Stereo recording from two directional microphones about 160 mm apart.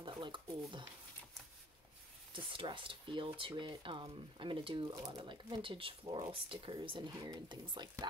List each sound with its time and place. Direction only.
0.0 s speech: 30° right (ahead or behind)
2.3 s speech: 30° right (ahead or behind)